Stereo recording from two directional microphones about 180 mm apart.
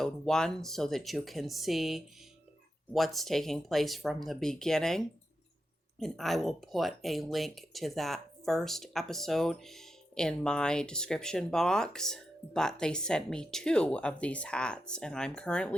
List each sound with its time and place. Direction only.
0.0 s speech: 5° left (ahead or behind)